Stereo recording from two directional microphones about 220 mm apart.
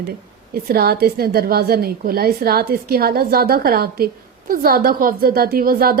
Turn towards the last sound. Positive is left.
turn(degrees=-40)  # may be behind; listen again after turning